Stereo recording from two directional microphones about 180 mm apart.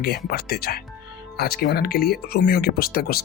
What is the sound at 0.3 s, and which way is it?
Speech, 60° left (ahead or behind).